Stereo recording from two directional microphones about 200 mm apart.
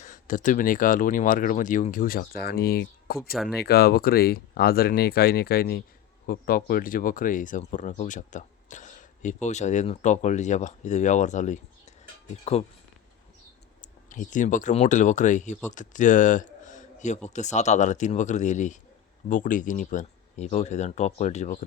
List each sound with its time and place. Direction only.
0.0 s speech: 40° left (ahead or behind)
13.8 s a man's voice: 40° left (ahead or behind)